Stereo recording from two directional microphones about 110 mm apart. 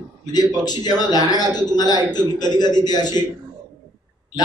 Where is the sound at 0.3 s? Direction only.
40° left (ahead or behind).